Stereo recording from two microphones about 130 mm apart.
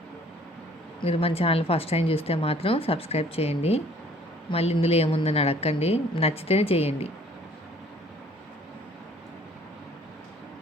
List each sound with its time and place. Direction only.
1.0 s speech: 50° left (ahead or behind)